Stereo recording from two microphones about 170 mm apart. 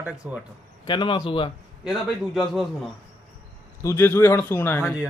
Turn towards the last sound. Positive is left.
turn(degrees=15)  # may be behind; listen again after turning